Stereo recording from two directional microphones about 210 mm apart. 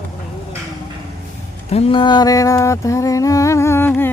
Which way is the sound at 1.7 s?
30° left (ahead or behind).